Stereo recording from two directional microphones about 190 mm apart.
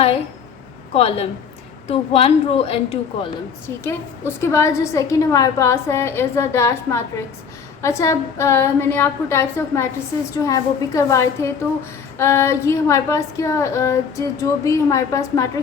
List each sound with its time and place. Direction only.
0.9 s speech: 30° left (ahead or behind)
3.8 s a woman's voice: 15° left (ahead or behind)